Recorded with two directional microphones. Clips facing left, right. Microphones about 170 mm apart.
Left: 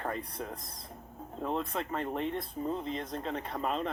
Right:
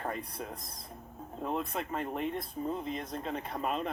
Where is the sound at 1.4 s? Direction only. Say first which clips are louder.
Left 1 dB; 5° right (ahead or behind).